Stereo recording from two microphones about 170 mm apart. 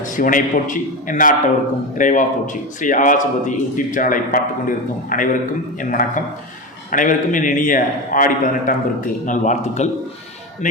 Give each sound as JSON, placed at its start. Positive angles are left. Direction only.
{"t": 0.0, "sound": "a man's voice", "side_deg": 55}